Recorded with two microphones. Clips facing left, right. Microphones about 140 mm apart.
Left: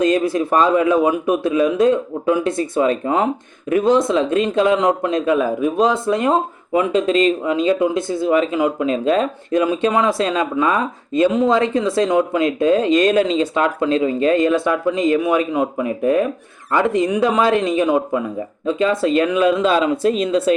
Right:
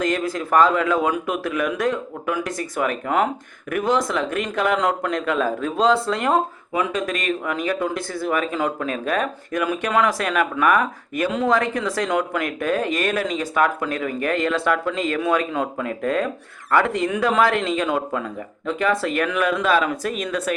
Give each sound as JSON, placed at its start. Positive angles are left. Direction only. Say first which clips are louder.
{"t": 0.0, "sound": "a man's voice", "louder": "left 7 dB", "side_deg": 20}